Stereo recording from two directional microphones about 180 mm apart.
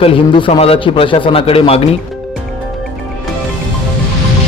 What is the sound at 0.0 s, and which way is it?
A man's voice, 30° left (ahead or behind).